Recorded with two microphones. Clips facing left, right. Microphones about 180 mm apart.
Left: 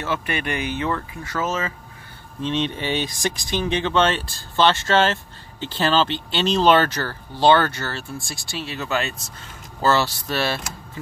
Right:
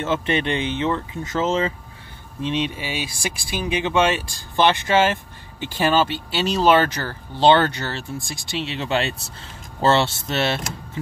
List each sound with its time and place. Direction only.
0.0 s speech: 25° right (ahead or behind)
2.4 s speech: 10° right (ahead or behind)